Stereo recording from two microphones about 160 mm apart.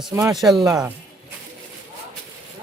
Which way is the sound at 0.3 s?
Centre (ahead or behind).